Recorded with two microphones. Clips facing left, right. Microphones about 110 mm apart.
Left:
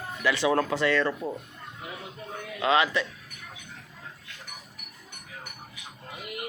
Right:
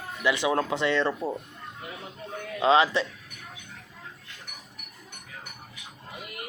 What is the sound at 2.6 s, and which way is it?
Speech, 30° right (ahead or behind).